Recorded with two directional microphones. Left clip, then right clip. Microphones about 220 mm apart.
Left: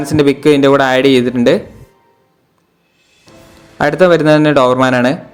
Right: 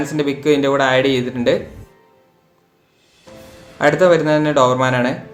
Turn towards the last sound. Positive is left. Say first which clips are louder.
# left 5 dB
turn(degrees=40)  # may be behind; listen again after turning